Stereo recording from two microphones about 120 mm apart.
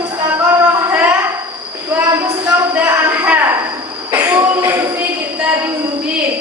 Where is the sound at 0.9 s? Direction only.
15° right (ahead or behind).